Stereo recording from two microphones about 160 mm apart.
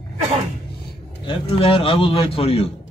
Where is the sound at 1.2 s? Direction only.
35° left (ahead or behind).